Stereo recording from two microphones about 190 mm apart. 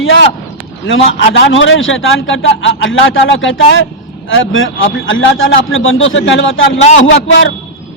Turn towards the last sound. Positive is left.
turn(degrees=70)  # may be behind; listen again after turning